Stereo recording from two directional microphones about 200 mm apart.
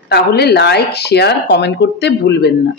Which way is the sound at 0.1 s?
55° left (ahead or behind).